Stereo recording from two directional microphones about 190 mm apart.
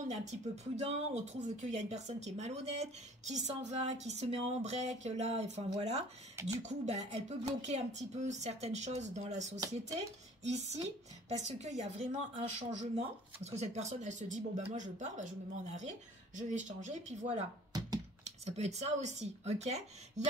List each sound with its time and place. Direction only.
0.1 s a woman's voice: 35° right (ahead or behind)